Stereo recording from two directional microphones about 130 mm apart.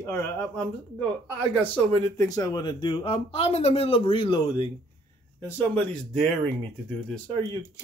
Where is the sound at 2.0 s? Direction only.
20° left (ahead or behind).